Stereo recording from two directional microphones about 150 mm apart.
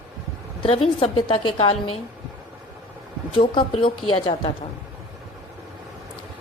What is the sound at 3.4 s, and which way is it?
Speech, 35° left (ahead or behind).